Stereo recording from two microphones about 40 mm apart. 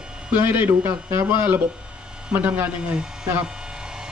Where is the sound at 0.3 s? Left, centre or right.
Right.